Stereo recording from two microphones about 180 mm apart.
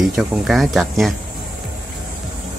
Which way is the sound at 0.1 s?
Centre (ahead or behind).